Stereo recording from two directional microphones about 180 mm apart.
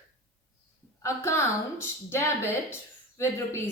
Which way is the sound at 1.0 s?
15° left (ahead or behind).